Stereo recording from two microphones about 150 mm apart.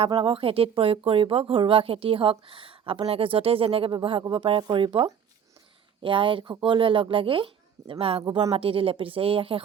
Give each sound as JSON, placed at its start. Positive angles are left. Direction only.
{"t": 0.0, "sound": "speech", "side_deg": -35}